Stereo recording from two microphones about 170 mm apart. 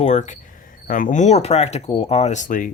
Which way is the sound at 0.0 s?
45° left (ahead or behind).